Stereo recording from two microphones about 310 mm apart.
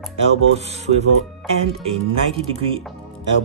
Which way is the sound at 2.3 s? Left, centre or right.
Centre.